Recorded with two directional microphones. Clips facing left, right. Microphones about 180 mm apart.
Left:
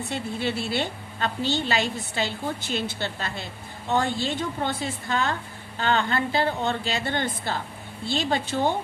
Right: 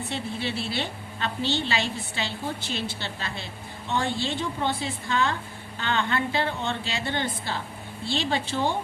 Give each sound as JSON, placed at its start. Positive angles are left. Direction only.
{"t": 0.1, "sound": "a woman's voice", "side_deg": 45}